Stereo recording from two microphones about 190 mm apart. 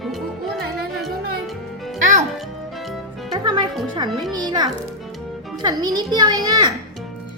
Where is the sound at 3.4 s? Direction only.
25° right (ahead or behind).